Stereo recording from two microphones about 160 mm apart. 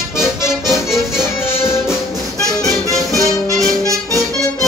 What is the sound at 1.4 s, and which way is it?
Music, 15° left (ahead or behind).